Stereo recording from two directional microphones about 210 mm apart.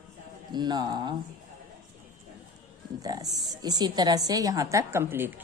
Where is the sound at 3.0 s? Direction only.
20° right (ahead or behind).